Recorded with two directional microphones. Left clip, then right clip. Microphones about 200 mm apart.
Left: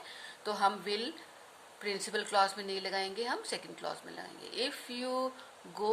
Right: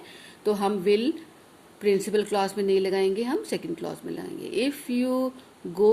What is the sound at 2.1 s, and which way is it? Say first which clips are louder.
Speech: right 5 dB; 30° right (ahead or behind).